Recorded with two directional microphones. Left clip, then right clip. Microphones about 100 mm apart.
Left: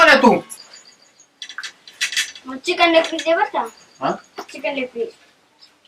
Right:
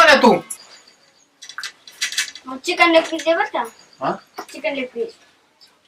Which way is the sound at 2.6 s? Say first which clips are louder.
Even; 10° right (ahead or behind).